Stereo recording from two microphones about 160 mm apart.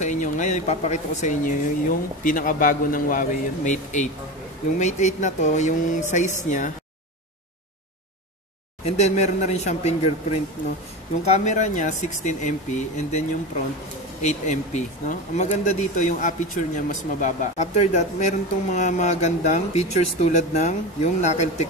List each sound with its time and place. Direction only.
0.0 s speech: 50° left (ahead or behind)
8.8 s speech: 45° left (ahead or behind)
11.3 s speech: 45° left (ahead or behind)
14.2 s speech: 50° left (ahead or behind)